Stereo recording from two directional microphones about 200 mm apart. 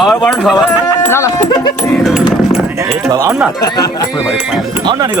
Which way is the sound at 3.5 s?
20° left (ahead or behind).